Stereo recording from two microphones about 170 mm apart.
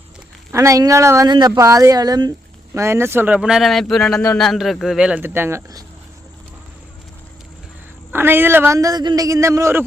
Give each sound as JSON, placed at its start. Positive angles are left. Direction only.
{"t": 0.5, "sound": "speech", "side_deg": -15}
{"t": 8.1, "sound": "a man's voice", "side_deg": -10}